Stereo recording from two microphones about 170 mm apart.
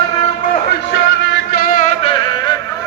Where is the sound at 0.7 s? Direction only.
90° left; by 1.9 s 50° left (ahead or behind).